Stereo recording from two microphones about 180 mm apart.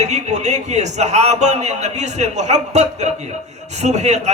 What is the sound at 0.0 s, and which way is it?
Speech, 40° right (ahead or behind).